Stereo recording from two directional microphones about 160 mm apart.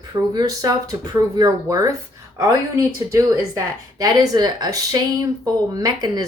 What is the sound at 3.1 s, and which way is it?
Speech, 20° right (ahead or behind).